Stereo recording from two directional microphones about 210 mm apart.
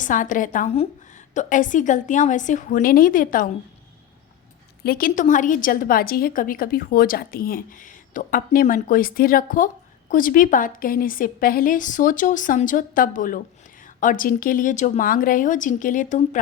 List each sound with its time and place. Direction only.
0.0 s a woman's voice: 40° left (ahead or behind)
4.8 s a woman's voice: 45° left (ahead or behind)